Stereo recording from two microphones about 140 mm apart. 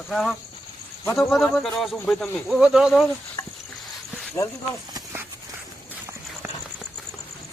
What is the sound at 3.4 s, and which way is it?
Cricket, 20° left (ahead or behind).